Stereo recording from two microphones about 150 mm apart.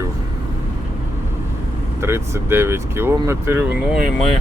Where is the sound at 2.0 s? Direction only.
15° right (ahead or behind).